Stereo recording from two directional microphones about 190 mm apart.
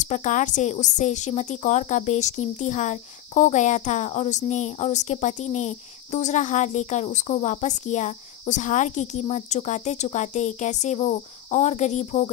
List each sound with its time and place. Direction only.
0.0 s speech: 40° left (ahead or behind)